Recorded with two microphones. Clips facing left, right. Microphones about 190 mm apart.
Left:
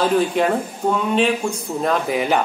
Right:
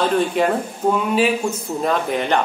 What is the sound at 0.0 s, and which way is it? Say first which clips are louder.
Speech: even; centre (ahead or behind).